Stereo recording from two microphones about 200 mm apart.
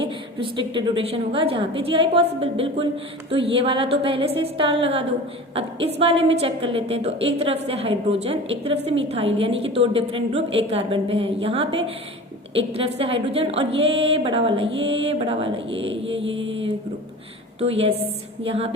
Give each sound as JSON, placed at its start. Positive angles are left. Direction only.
{"t": 0.3, "sound": "a woman's voice", "side_deg": -25}
{"t": 16.1, "sound": "mantra", "side_deg": -70}
{"t": 16.5, "sound": "mantra", "side_deg": -30}
{"t": 17.6, "sound": "a woman's voice", "side_deg": -30}